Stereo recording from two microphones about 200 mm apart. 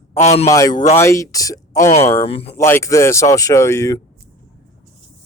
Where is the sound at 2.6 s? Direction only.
15° left (ahead or behind).